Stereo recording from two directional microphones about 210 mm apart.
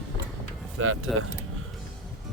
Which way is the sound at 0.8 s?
80° right.